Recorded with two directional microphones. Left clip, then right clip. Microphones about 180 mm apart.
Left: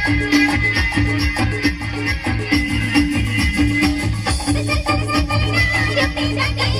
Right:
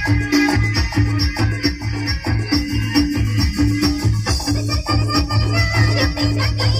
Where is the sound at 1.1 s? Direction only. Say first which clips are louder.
Left 2 dB; 25° left (ahead or behind).